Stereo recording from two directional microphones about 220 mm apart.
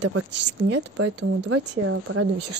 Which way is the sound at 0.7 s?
90° right.